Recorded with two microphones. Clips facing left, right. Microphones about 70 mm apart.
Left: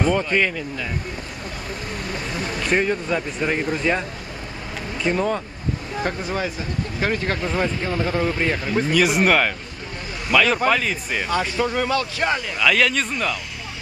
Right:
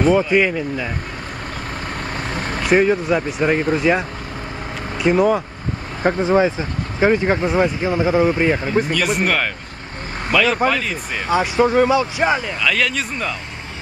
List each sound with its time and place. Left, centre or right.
0.0 s speech: centre
2.0 s vehicle: right
2.6 s speech: centre
6.0 s speech: right
8.9 s speech: centre
11.5 s speech: right
11.9 s speech: centre
12.5 s speech: centre